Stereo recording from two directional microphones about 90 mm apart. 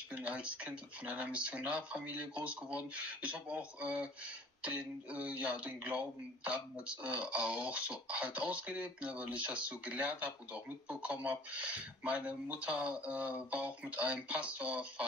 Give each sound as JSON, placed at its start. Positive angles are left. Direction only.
{"t": 0.1, "sound": "speech", "side_deg": -15}